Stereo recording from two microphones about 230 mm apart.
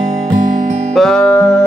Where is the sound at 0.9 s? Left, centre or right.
Centre.